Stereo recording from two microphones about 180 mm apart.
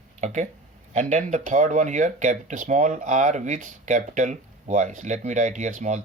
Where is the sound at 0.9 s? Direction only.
40° right (ahead or behind).